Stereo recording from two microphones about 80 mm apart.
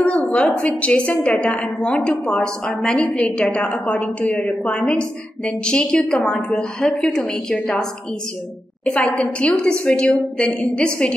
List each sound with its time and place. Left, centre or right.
0.0 s a woman's voice: centre
8.8 s a woman's voice: centre